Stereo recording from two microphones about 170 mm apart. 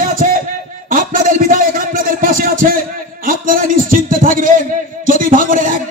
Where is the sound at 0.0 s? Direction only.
55° right (ahead or behind).